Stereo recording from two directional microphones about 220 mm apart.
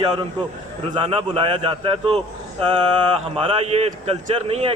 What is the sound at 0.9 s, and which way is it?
A man's voice, 25° right (ahead or behind).